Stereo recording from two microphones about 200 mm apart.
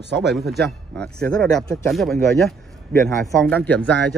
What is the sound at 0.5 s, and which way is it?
Speech, centre (ahead or behind).